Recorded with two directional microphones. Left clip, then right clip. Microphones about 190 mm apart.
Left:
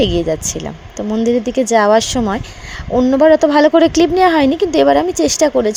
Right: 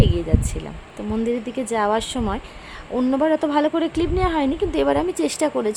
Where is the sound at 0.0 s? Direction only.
30° left (ahead or behind).